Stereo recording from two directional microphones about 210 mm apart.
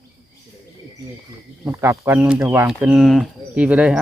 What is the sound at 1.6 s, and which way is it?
Speech, 10° right (ahead or behind).